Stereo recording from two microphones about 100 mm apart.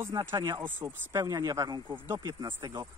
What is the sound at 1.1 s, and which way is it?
Speech, 35° right (ahead or behind).